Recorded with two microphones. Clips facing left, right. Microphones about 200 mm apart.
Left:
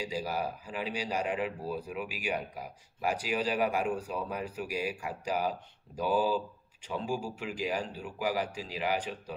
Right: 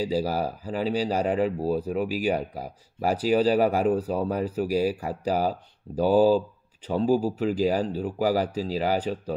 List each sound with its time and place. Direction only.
0.0 s speech: 35° right (ahead or behind)